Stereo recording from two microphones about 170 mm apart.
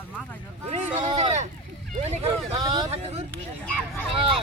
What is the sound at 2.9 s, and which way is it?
Speech, 35° right (ahead or behind).